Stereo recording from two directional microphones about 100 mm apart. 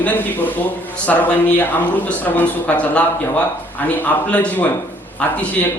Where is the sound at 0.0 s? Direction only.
15° left (ahead or behind).